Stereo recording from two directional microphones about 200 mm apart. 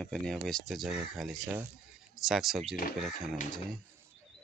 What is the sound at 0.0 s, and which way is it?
Speech, 5° left (ahead or behind).